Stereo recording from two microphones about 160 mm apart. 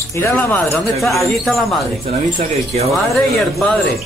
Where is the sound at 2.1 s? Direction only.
50° right (ahead or behind).